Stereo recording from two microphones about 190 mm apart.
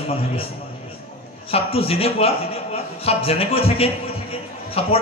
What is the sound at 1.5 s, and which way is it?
A man's voice, 30° left (ahead or behind).